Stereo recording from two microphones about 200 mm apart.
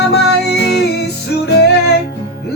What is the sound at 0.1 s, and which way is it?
Music, 55° left (ahead or behind).